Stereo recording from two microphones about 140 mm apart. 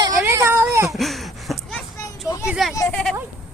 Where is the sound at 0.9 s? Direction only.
Centre (ahead or behind).